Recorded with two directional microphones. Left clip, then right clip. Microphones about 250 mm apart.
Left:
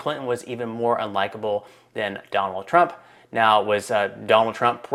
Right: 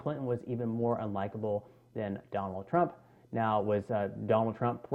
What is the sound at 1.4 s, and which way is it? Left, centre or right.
Speech, left.